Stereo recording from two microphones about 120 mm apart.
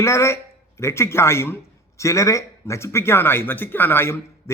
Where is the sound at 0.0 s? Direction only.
25° left (ahead or behind).